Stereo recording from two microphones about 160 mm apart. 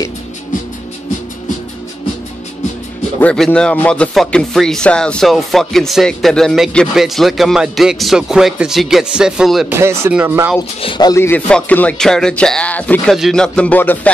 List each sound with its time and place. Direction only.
3.2 s speech: 5° left (ahead or behind)
9.7 s speech: 15° right (ahead or behind)
10.8 s speech: 30° left (ahead or behind)
11.1 s speech: 10° left (ahead or behind)